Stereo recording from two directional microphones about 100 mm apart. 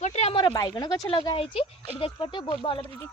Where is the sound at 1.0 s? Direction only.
50° left (ahead or behind).